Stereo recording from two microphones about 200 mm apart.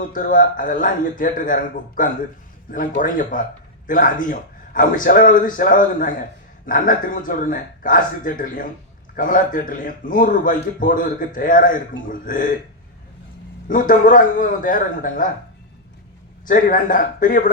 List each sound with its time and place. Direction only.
0.1 s a man's voice: 40° left (ahead or behind)
13.7 s a man's voice: 40° left (ahead or behind)
16.5 s a man's voice: 45° left (ahead or behind)